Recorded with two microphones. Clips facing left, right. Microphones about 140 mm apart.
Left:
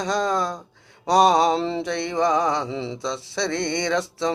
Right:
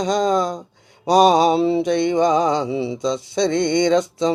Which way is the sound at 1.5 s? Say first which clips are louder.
Right 7 dB; 10° right (ahead or behind).